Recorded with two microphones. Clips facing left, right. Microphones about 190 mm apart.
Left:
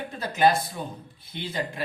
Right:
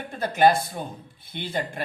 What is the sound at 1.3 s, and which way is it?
Speech, 55° right (ahead or behind).